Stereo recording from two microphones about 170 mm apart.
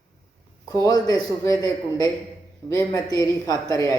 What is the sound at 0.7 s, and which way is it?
Speech, 20° left (ahead or behind).